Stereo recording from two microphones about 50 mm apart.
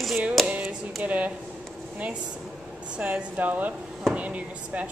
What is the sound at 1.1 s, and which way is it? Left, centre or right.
Speech, right.